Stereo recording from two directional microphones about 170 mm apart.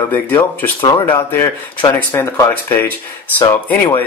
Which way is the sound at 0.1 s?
10° left (ahead or behind).